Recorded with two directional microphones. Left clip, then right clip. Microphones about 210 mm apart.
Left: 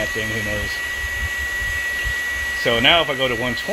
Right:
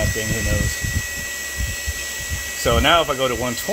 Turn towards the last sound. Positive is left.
turn(degrees=-5)  # may be behind; listen again after turning